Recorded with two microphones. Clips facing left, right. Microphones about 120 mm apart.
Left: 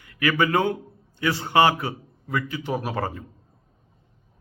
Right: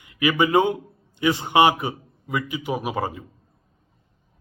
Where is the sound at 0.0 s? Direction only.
20° right (ahead or behind).